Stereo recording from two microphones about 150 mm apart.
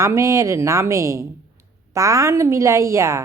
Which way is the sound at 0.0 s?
20° right (ahead or behind).